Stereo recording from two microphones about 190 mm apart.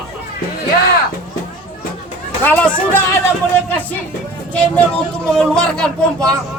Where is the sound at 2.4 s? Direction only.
5° left (ahead or behind).